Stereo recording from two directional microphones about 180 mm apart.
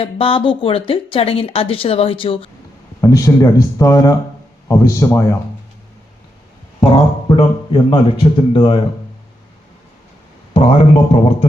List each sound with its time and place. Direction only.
0.0 s speech: 30° left (ahead or behind)
3.0 s speech: 15° left (ahead or behind)
6.9 s a man's voice: 30° left (ahead or behind)
10.5 s speech: 30° left (ahead or behind)